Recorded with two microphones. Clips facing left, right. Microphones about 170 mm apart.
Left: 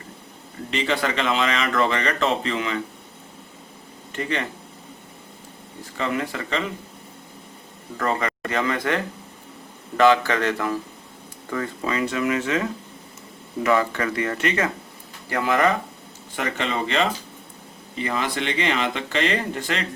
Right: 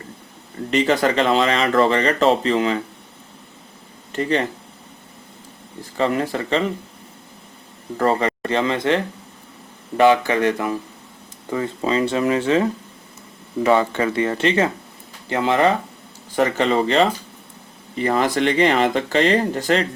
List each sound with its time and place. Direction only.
0.7 s speech: 40° right (ahead or behind)
4.1 s speech: 35° right (ahead or behind)
5.8 s speech: 35° right (ahead or behind)
7.9 s speech: 30° right (ahead or behind)
10.0 s speech: 15° right (ahead or behind)
16.3 s speech: 35° right (ahead or behind)